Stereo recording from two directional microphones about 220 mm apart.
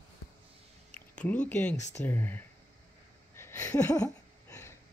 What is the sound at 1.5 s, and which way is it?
Speech, 5° left (ahead or behind).